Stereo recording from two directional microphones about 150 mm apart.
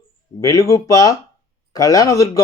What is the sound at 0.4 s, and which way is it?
Speech, 25° left (ahead or behind).